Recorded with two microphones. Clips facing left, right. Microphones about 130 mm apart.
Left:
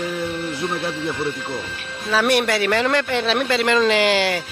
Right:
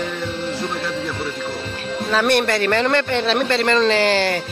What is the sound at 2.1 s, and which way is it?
Speech, 5° left (ahead or behind).